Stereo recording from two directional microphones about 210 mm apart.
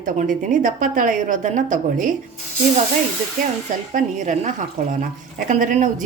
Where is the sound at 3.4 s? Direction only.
35° right (ahead or behind).